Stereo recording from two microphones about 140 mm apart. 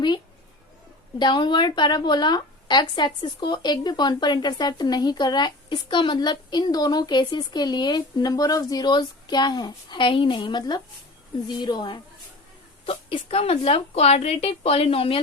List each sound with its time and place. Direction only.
1.2 s a woman's voice: 35° left (ahead or behind)